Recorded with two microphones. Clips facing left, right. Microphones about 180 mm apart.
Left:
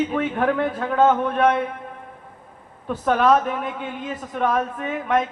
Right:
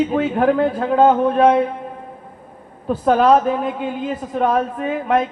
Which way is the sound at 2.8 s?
30° right (ahead or behind).